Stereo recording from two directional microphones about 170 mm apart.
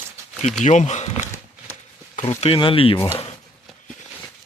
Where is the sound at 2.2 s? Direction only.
35° left (ahead or behind).